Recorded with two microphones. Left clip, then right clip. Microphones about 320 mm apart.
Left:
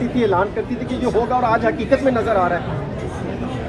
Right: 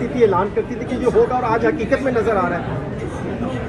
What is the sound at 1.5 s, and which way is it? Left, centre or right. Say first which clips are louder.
Speech: left 1 dB; left.